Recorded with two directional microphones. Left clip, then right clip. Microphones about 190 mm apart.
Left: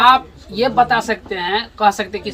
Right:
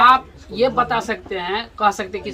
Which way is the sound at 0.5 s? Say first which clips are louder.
Left 3 dB; 15° left (ahead or behind).